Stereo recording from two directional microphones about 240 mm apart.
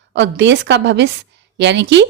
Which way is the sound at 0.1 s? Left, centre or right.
Right.